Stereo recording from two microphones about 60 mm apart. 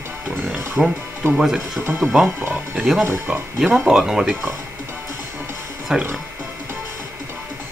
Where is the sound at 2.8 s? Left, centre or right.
Centre.